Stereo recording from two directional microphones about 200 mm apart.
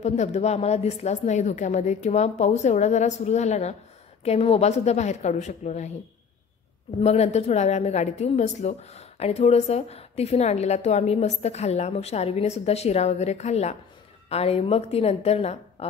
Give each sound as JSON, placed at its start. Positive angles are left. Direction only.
{"t": 0.0, "sound": "a woman's voice", "side_deg": 35}
{"t": 7.0, "sound": "a woman's voice", "side_deg": 35}